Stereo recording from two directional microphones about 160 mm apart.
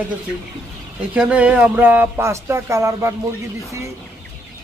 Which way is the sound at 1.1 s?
5° right (ahead or behind).